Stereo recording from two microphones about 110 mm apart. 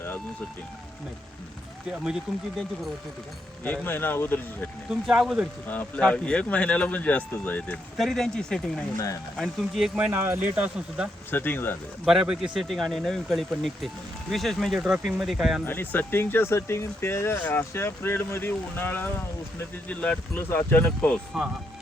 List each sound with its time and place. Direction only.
3.6 s speech: 15° left (ahead or behind)
4.9 s speech: 5° right (ahead or behind)
6.0 s speech: 10° left (ahead or behind)
7.9 s speech: centre (ahead or behind)
10.1 s speech: 20° right (ahead or behind)
10.5 s speech: 10° right (ahead or behind)
11.3 s speech: 20° left (ahead or behind)
12.0 s speech: 5° right (ahead or behind)
15.6 s speech: 20° left (ahead or behind)